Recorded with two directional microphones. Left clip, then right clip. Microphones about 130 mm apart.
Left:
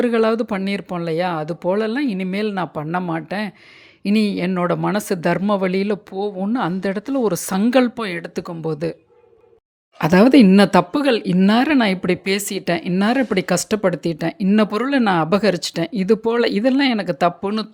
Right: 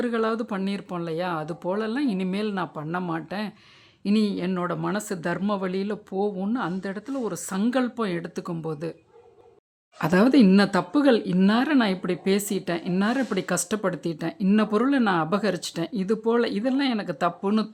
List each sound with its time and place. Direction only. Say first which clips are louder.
0.0 s speech: left 8 dB; 35° left (ahead or behind)
10.0 s speech: left 7 dB; 30° left (ahead or behind)
10.6 s speech: left 7 dB; 45° left (ahead or behind)